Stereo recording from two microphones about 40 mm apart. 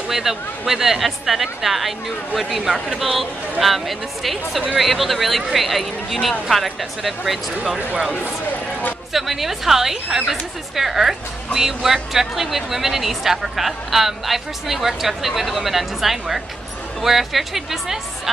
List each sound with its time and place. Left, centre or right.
0.1 s speech: centre
2.6 s speech: centre
3.0 s speech: centre
9.1 s a woman's voice: centre